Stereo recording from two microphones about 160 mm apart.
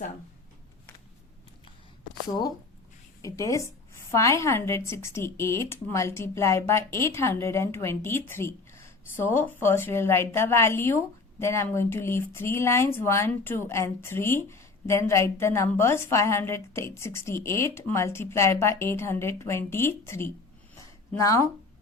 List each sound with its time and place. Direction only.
3.2 s speech: 20° left (ahead or behind)